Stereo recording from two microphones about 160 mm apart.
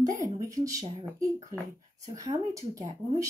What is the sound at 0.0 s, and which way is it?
Speech, 20° right (ahead or behind).